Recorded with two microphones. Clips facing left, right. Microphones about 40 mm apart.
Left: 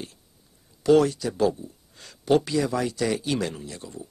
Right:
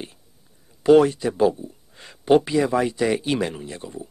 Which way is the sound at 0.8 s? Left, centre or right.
Right.